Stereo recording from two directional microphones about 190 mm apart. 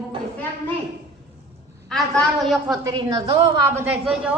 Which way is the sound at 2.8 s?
20° right (ahead or behind).